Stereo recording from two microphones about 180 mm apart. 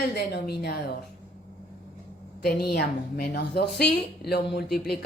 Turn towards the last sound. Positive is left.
turn(degrees=60)  # may be behind; listen again after turning